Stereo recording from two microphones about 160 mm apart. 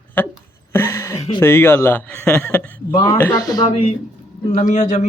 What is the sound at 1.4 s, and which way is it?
A man's voice, 15° left (ahead or behind).